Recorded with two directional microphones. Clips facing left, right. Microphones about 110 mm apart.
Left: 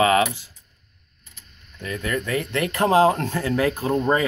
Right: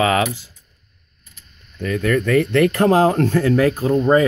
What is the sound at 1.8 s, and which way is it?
Speech, 50° right (ahead or behind).